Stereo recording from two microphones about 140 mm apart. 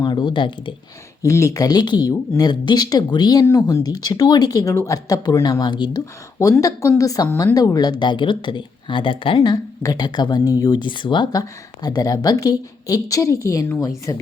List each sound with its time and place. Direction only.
0.0 s speech: 35° left (ahead or behind)
1.2 s a woman's voice: 25° left (ahead or behind)
3.4 s a woman's voice: 20° left (ahead or behind)